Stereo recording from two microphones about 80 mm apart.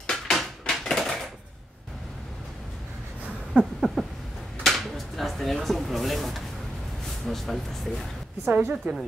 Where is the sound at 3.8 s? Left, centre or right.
Centre.